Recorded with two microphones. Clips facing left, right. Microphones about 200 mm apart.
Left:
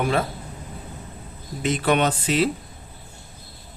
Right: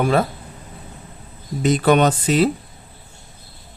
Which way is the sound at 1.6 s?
40° right (ahead or behind).